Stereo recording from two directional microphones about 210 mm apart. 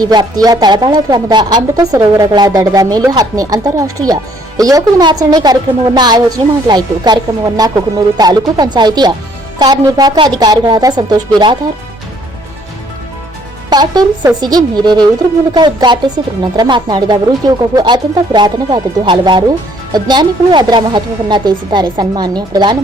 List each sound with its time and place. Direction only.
0.0 s speech: 20° right (ahead or behind)
13.7 s speech: 20° right (ahead or behind)